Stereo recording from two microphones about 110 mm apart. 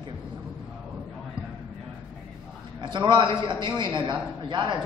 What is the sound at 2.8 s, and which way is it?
A man's voice, 45° right (ahead or behind).